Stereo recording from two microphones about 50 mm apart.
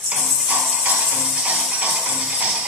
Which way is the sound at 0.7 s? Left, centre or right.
Centre.